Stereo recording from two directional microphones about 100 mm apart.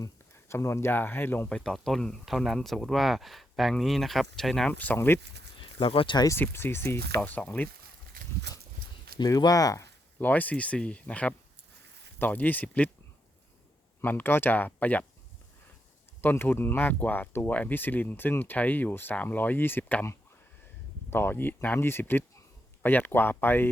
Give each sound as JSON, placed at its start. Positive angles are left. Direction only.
{"t": 0.0, "sound": "speech", "side_deg": 30}
{"t": 1.5, "sound": "speech", "side_deg": 10}
{"t": 4.7, "sound": "speech", "side_deg": 20}
{"t": 5.8, "sound": "speech", "side_deg": 65}
{"t": 6.3, "sound": "speech", "side_deg": 25}
{"t": 9.1, "sound": "speech", "side_deg": 40}
{"t": 10.2, "sound": "speech", "side_deg": 15}
{"t": 14.0, "sound": "speech", "side_deg": 20}
{"t": 16.2, "sound": "speech", "side_deg": 20}
{"t": 21.1, "sound": "speech", "side_deg": 20}